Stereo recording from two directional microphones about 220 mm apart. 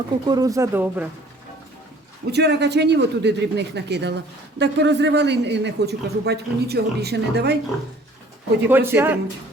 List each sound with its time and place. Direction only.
0.3 s speech: 15° right (ahead or behind)
2.3 s speech: 50° right (ahead or behind)
8.7 s speech: 10° right (ahead or behind)